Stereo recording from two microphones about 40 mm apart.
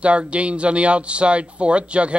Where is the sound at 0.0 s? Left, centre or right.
Right.